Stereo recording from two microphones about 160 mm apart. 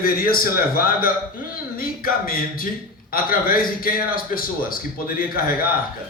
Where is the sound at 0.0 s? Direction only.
65° left (ahead or behind).